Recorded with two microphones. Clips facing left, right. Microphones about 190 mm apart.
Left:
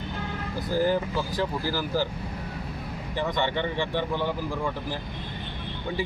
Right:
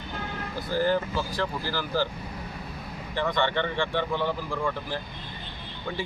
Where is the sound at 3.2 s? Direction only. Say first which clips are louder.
Right 1 dB; 10° left (ahead or behind).